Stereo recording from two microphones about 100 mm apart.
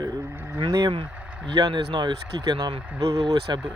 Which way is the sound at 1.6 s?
45° right (ahead or behind).